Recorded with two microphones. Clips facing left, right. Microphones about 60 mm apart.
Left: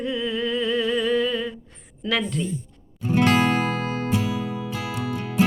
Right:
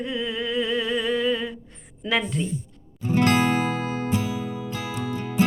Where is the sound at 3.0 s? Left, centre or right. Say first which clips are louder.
Left 1 dB; left.